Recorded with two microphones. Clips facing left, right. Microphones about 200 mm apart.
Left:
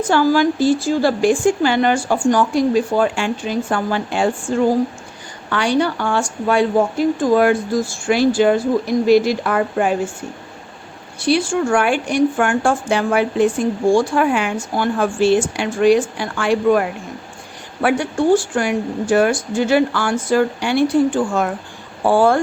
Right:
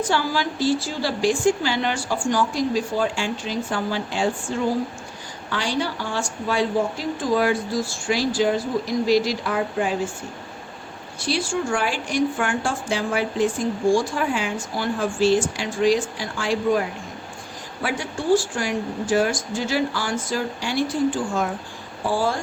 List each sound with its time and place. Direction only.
0.0 s speech: 50° left (ahead or behind)
11.3 s speech: 60° left (ahead or behind)
22.0 s speech: 60° left (ahead or behind)